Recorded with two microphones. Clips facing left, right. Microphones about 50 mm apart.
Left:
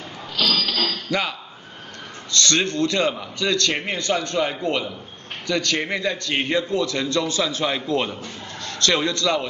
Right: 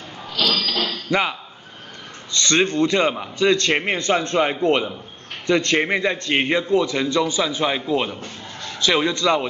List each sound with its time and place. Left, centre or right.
0.4 s mechanisms: centre
0.8 s a sound: right
2.3 s a man's voice: right